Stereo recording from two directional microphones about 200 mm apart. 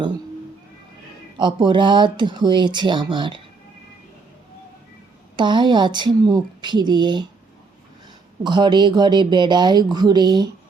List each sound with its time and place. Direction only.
1.4 s speech: 25° right (ahead or behind)
5.4 s speech: 25° right (ahead or behind)
8.4 s speech: 20° right (ahead or behind)